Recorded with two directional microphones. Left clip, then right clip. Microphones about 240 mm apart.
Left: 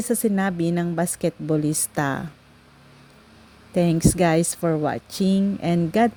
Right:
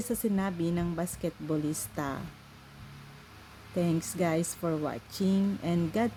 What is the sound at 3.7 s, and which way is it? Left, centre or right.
A woman's voice, left.